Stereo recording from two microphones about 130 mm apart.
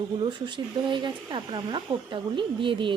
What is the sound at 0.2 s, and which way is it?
Speech, 40° right (ahead or behind).